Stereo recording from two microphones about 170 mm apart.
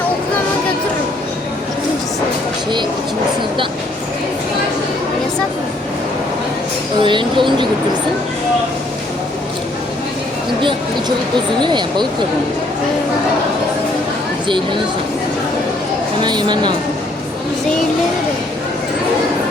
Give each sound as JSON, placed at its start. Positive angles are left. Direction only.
{"t": 7.0, "sound": "speech", "side_deg": -30}
{"t": 11.6, "sound": "speech", "side_deg": -25}
{"t": 14.4, "sound": "speech", "side_deg": -30}
{"t": 16.2, "sound": "speech", "side_deg": -25}